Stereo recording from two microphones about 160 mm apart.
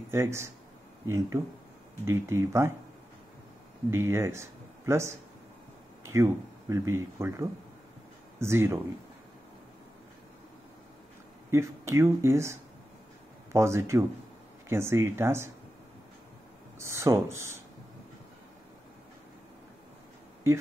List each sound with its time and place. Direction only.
0.1 s speech: 15° right (ahead or behind)
3.9 s speech: 15° right (ahead or behind)
11.5 s speech: 15° right (ahead or behind)
16.7 s speech: 15° right (ahead or behind)